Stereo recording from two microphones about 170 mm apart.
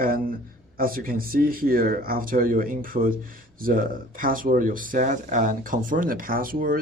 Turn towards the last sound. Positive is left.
turn(degrees=-55)  # may be behind; listen again after turning